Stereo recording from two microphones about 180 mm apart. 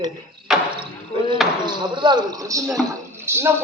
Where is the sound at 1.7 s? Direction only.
25° right (ahead or behind).